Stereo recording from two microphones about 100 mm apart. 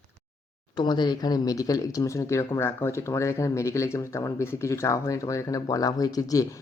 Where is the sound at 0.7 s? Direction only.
45° left (ahead or behind).